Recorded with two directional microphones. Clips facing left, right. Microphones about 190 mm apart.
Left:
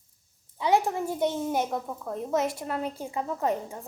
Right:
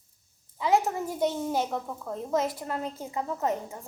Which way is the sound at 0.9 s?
20° left (ahead or behind).